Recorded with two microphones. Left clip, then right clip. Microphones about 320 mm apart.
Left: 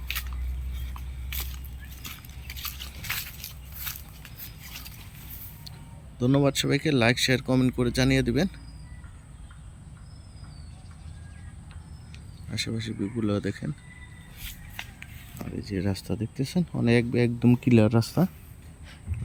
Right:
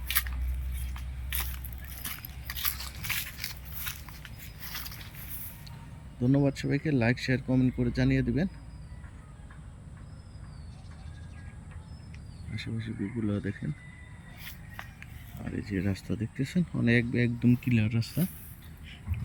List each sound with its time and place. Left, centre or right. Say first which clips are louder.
1.3 s a sound: even; centre
2.6 s biting: right 2 dB; centre
3.9 s a sound: left 1 dB; centre
6.1 s speech: left 4 dB; centre
12.5 s speech: left 7 dB; centre
15.5 s speech: left 2 dB; centre
17.7 s speech: left 11 dB; left